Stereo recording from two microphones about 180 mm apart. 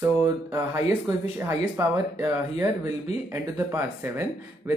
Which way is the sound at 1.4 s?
15° right (ahead or behind).